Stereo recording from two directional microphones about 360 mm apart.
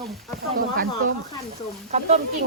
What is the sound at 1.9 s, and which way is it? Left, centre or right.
Speech, centre.